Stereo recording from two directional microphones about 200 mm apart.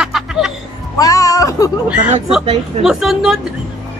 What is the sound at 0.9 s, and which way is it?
Speech, 15° left (ahead or behind).